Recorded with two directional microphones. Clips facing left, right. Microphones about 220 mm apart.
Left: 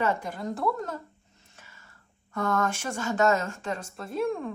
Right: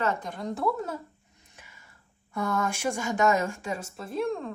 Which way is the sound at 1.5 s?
15° right (ahead or behind).